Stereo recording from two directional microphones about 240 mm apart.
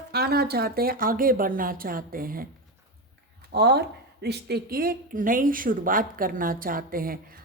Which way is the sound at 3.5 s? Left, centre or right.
Right.